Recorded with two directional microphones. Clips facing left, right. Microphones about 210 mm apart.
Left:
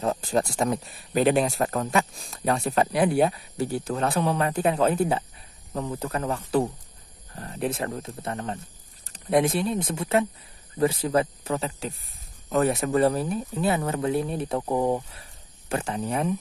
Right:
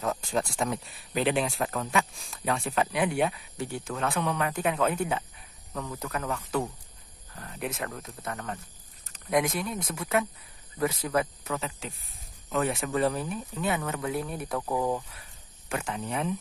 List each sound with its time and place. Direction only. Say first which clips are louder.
0.0 s speech: left 5 dB; 35° left (ahead or behind)
15.7 s speech: left 5 dB; 35° left (ahead or behind)